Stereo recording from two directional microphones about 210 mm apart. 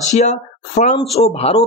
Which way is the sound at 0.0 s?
35° left (ahead or behind).